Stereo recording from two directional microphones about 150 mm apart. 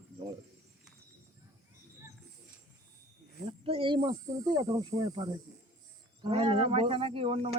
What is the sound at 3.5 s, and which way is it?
Speech, 35° right (ahead or behind).